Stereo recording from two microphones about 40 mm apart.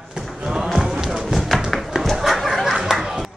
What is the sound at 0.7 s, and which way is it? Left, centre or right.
Run, centre.